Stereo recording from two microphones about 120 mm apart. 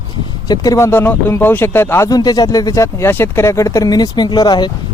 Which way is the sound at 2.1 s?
35° left (ahead or behind).